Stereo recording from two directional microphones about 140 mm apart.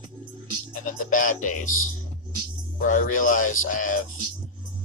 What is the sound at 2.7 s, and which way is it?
Speech, 70° left (ahead or behind).